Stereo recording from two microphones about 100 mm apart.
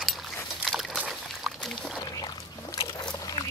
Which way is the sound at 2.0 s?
40° left (ahead or behind).